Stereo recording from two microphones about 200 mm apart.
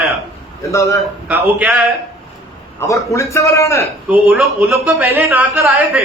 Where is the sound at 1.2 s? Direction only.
10° right (ahead or behind).